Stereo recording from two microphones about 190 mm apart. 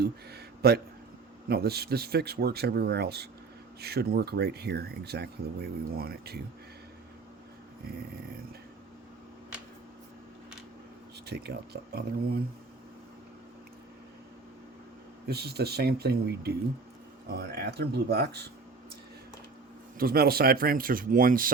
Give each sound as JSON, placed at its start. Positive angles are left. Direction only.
{"t": 0.0, "sound": "a sound", "side_deg": -55}
{"t": 1.5, "sound": "speech", "side_deg": -55}
{"t": 11.3, "sound": "speech", "side_deg": -60}
{"t": 15.3, "sound": "speech", "side_deg": -55}
{"t": 20.0, "sound": "speech", "side_deg": -55}